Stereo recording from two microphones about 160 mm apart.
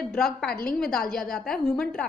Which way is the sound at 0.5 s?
65° left (ahead or behind).